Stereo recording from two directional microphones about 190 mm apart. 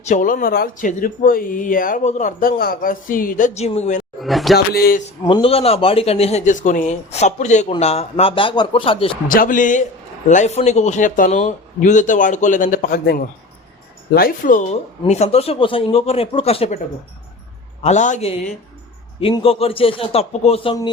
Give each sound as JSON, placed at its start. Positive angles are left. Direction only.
{"t": 0.0, "sound": "speech", "side_deg": 40}
{"t": 4.2, "sound": "speech", "side_deg": 0}
{"t": 4.5, "sound": "speech", "side_deg": 55}
{"t": 5.3, "sound": "speech", "side_deg": 30}
{"t": 9.3, "sound": "speech", "side_deg": 45}
{"t": 17.8, "sound": "speech", "side_deg": 40}